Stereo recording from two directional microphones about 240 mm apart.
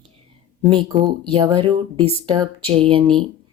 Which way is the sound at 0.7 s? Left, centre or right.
Right.